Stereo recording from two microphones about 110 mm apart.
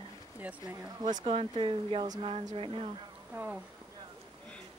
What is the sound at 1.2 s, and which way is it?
Speech, 55° right (ahead or behind).